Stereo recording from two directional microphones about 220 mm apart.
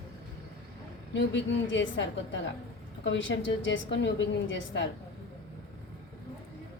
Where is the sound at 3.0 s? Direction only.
55° left (ahead or behind).